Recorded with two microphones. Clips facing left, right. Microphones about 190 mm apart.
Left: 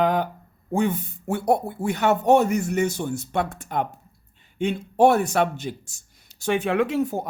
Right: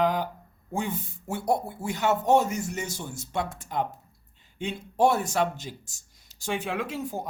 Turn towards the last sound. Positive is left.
turn(degrees=65)  # may be behind; listen again after turning